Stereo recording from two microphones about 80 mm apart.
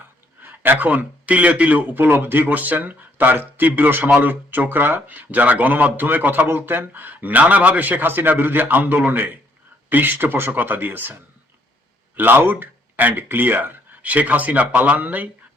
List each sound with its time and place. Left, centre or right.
0.4 s speech: right